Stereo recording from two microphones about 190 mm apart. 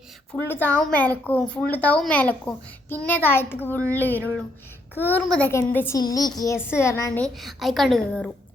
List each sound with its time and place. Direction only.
0.4 s a woman's voice: 10° left (ahead or behind)